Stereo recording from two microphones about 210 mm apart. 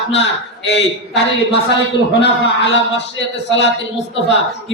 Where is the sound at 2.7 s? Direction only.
60° left (ahead or behind).